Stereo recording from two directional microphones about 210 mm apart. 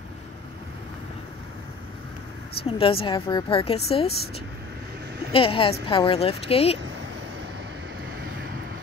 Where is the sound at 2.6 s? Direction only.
25° left (ahead or behind).